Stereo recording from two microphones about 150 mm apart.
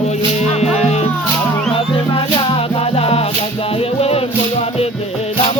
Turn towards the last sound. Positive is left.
turn(degrees=40)  # may be behind; listen again after turning